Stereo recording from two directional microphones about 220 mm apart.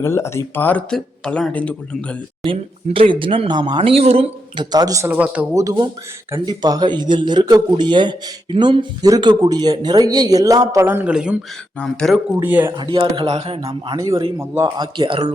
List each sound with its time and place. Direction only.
0.0 s speech: 10° left (ahead or behind)
2.4 s speech: 25° right (ahead or behind); by 12.2 s 5° left (ahead or behind)
12.4 s speech: 10° right (ahead or behind)
12.7 s speech: 20° right (ahead or behind)
13.7 s speech: 15° right (ahead or behind)